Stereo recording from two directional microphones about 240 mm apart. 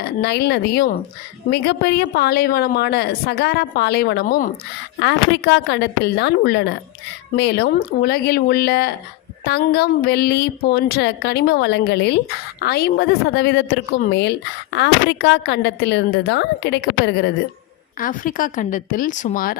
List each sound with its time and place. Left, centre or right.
0.2 s a woman's voice: left
18.0 s speech: left